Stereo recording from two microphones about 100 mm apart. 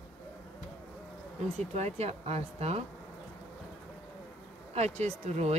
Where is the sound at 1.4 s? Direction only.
90° right.